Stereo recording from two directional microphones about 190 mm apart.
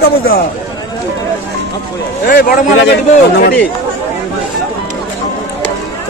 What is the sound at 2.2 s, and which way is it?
Speech, 50° left (ahead or behind).